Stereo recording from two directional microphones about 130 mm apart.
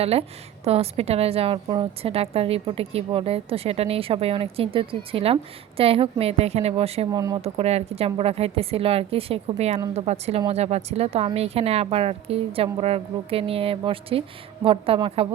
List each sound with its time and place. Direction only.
0.0 s a woman's voice: 50° right (ahead or behind)
1.6 s speech: 35° right (ahead or behind)
2.0 s a woman's voice: 50° right (ahead or behind)
7.1 s speech: 30° right (ahead or behind)
7.4 s a woman's voice: 50° right (ahead or behind)